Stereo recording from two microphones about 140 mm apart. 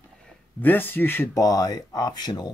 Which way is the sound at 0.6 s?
15° left (ahead or behind).